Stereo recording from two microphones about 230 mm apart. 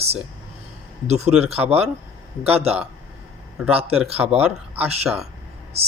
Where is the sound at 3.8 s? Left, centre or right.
Right.